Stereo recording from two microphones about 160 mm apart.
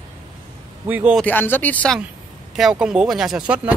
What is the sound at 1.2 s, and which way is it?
Speech, 10° left (ahead or behind).